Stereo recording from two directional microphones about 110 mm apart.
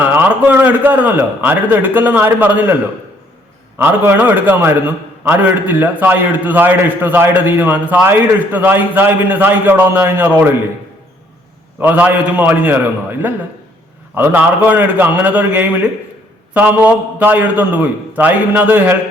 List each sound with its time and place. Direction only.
0.0 s a man's voice: 20° right (ahead or behind)
3.8 s a man's voice: 20° right (ahead or behind)
11.8 s a man's voice: 15° right (ahead or behind)